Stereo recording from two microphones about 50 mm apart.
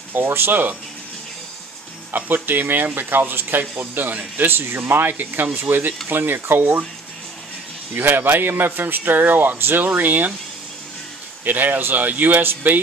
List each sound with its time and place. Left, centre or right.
0.1 s speech: right
2.1 s speech: right
4.5 s a man's voice: right
7.9 s a man's voice: right
11.4 s speech: right